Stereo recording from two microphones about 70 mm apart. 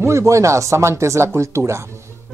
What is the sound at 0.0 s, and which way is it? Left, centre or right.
Speech, right.